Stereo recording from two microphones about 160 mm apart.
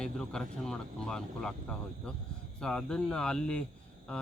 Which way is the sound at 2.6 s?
5° left (ahead or behind).